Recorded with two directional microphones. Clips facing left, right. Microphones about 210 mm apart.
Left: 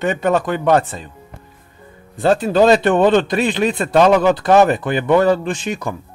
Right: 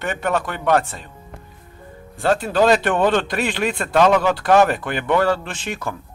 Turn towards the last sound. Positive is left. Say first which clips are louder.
# left 6 dB
turn(degrees=15)  # may be behind; listen again after turning